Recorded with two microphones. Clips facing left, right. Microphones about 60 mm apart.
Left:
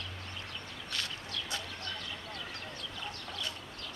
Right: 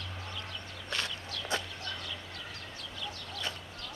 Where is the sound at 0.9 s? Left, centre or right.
Right.